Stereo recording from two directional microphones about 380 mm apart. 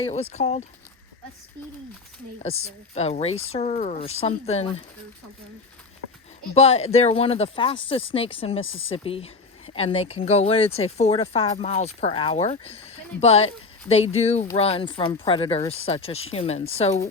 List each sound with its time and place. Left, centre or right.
0.0 s speech: centre
2.4 s speech: centre
6.5 s speech: centre
8.6 s speech: left
8.9 s speech: centre